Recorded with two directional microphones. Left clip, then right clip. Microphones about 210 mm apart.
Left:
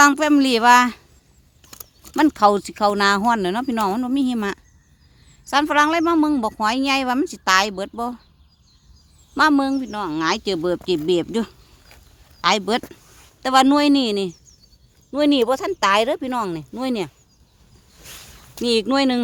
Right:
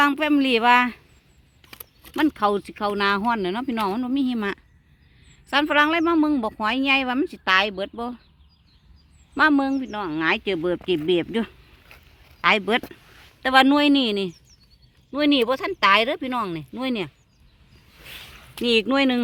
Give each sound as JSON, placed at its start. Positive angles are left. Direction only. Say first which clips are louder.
{"t": 0.0, "sound": "speech", "louder": "left 5 dB", "side_deg": 15}
{"t": 1.6, "sound": "a sound", "louder": "left 1 dB", "side_deg": 40}
{"t": 2.1, "sound": "speech", "louder": "left 6 dB", "side_deg": 20}
{"t": 9.3, "sound": "speech", "louder": "left 2 dB", "side_deg": 5}
{"t": 18.5, "sound": "speech", "louder": "left 1 dB", "side_deg": 0}